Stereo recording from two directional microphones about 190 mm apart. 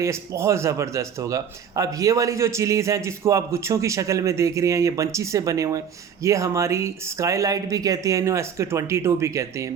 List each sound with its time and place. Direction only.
0.0 s a man's voice: 15° right (ahead or behind)